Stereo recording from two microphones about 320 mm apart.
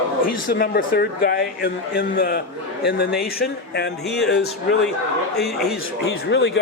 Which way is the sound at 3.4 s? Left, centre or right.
Left.